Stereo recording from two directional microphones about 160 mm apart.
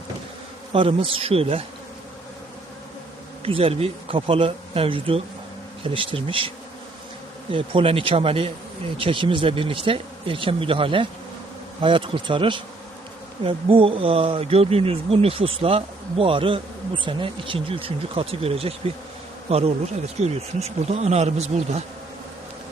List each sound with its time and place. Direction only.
0.7 s speech: 35° right (ahead or behind)
3.4 s speech: 35° right (ahead or behind)
7.5 s speech: 35° right (ahead or behind)